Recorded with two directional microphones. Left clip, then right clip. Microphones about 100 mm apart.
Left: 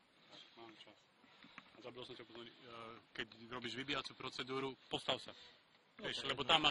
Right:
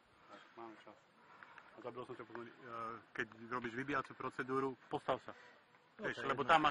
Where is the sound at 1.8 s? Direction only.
45° left (ahead or behind).